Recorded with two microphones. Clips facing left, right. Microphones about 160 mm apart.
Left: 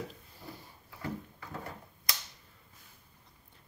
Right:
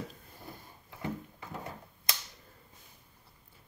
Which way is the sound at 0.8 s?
20° right (ahead or behind).